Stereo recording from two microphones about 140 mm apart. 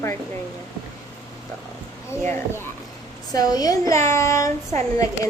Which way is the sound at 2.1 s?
15° left (ahead or behind).